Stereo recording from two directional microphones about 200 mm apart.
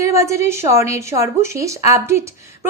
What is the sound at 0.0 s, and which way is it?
A woman's voice, 15° right (ahead or behind).